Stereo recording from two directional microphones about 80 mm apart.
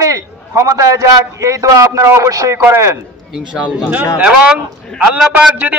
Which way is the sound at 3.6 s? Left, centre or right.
Centre.